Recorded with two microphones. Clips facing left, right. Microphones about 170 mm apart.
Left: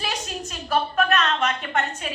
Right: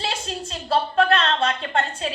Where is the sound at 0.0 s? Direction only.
30° right (ahead or behind).